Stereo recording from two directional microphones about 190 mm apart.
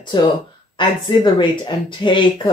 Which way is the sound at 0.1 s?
25° left (ahead or behind).